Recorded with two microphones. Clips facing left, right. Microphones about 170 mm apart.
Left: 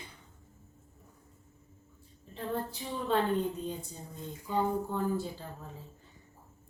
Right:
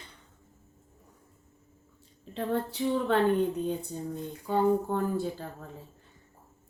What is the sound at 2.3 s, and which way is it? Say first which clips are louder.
Female singing: right 5 dB; 80° right.